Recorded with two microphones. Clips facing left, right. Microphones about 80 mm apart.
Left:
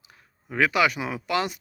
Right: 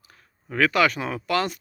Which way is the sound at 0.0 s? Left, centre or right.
Centre.